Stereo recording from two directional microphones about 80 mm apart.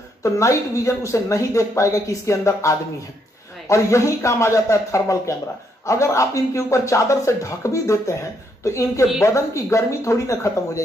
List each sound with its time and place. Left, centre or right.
0.2 s speech: left